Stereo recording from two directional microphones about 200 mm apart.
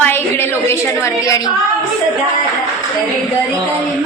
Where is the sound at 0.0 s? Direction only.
10° left (ahead or behind).